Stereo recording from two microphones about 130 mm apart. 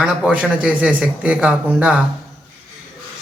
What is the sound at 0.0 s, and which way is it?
Speech, 10° right (ahead or behind).